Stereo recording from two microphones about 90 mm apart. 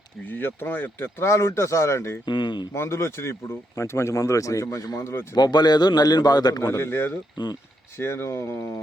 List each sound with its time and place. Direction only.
0.3 s speech: 20° left (ahead or behind)
2.2 s speech: 60° left (ahead or behind)
2.7 s speech: 30° left (ahead or behind)
5.4 s a man's voice: 50° left (ahead or behind)
6.6 s speech: 30° left (ahead or behind)
7.4 s a man's voice: 55° left (ahead or behind)
7.9 s speech: 30° left (ahead or behind)